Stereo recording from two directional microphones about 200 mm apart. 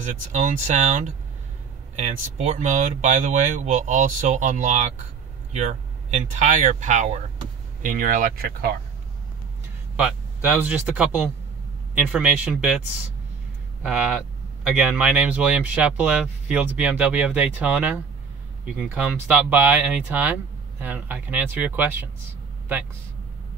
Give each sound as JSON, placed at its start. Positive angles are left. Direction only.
{"t": 0.3, "sound": "speech", "side_deg": -40}
{"t": 9.9, "sound": "speech", "side_deg": -10}
{"t": 13.8, "sound": "speech", "side_deg": -5}